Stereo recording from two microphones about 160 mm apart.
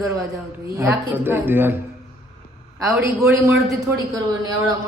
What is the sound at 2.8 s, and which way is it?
A woman's voice, 20° right (ahead or behind).